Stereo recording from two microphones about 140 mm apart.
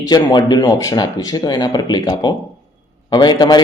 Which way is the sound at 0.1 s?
30° left (ahead or behind).